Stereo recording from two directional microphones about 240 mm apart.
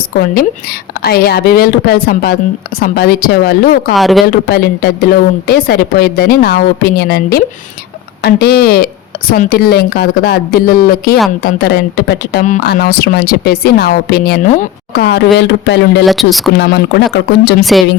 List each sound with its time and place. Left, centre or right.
1.0 s speech: left
3.9 s speech: centre
4.3 s speech: left
16.0 s speech: centre
16.6 s speech: left
17.6 s speech: centre